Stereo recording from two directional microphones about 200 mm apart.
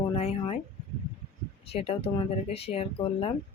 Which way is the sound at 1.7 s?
30° left (ahead or behind).